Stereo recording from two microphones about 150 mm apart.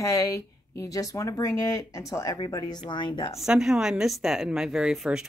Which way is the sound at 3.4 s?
5° right (ahead or behind).